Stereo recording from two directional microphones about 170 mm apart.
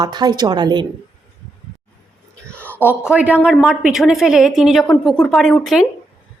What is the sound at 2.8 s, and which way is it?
A woman's voice, 10° right (ahead or behind).